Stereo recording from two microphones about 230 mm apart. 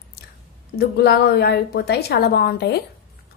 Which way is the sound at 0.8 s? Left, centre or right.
Left.